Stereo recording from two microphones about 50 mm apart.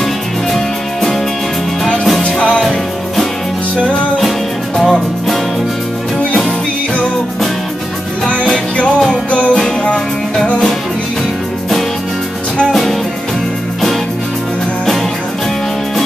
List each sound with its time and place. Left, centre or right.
2.2 s music: left
4.7 s music: centre
9.3 s music: left